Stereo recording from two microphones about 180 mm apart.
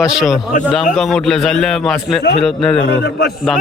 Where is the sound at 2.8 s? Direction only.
80° left.